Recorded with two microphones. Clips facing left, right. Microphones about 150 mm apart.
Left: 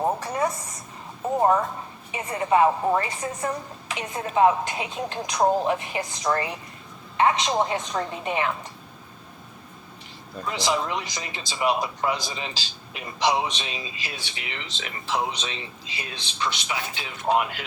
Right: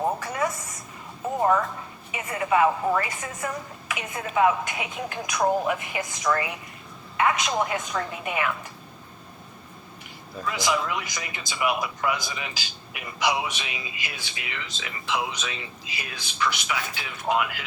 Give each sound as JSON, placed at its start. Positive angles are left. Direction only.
{"t": 0.2, "sound": "a woman's voice", "side_deg": 35}
{"t": 2.2, "sound": "a woman's voice", "side_deg": 30}
{"t": 10.4, "sound": "speech", "side_deg": 25}
{"t": 14.8, "sound": "speech", "side_deg": 40}